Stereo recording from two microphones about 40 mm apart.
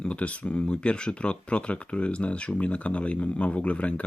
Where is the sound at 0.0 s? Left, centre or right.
Left.